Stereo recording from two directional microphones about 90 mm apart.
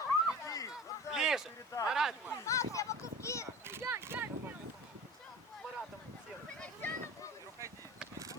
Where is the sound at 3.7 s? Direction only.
30° right (ahead or behind).